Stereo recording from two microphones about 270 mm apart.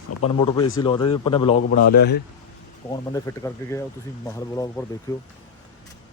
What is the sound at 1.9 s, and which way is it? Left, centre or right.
Speech, left.